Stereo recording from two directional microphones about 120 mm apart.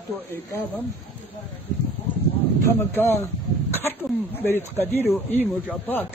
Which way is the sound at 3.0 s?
15° left (ahead or behind).